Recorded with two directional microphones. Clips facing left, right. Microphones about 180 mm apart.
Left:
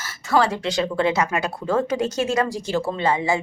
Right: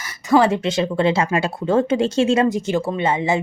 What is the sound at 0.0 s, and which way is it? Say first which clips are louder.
Speech: right 5 dB; 15° right (ahead or behind).